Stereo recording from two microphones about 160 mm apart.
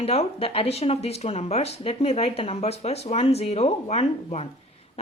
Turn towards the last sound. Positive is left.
turn(degrees=40)  # may be behind; listen again after turning